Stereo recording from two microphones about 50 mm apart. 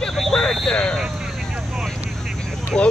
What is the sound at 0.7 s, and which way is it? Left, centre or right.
Vehicle, centre.